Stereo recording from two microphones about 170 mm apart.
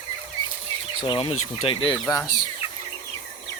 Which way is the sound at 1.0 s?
30° left (ahead or behind).